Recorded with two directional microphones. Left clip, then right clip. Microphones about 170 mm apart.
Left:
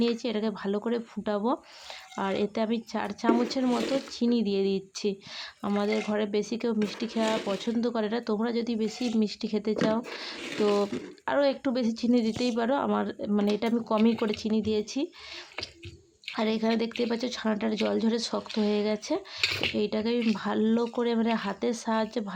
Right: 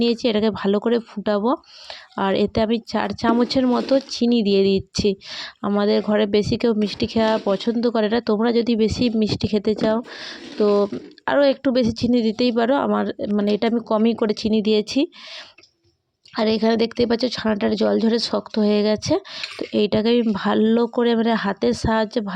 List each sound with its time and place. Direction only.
0.0 s speech: 40° right (ahead or behind)
16.3 s speech: 35° right (ahead or behind)